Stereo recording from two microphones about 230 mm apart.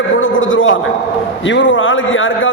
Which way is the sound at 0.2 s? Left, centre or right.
Left.